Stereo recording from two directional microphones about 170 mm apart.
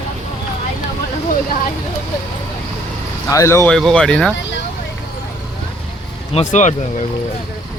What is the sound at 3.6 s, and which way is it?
Speech, 5° left (ahead or behind).